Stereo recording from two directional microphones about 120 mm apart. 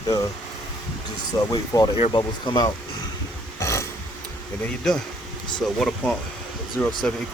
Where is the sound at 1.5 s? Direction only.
30° left (ahead or behind).